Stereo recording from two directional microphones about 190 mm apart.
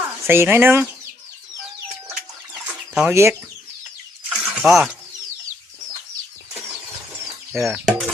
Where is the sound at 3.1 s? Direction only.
15° right (ahead or behind).